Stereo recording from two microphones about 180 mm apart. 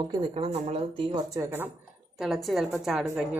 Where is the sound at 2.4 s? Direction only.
Centre (ahead or behind).